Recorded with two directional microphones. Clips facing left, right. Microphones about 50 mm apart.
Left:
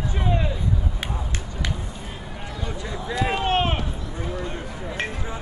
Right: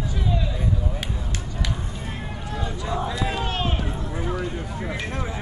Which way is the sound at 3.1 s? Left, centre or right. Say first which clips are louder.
Left 4 dB; left.